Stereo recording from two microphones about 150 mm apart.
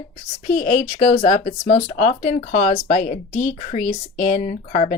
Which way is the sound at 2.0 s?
60° left (ahead or behind).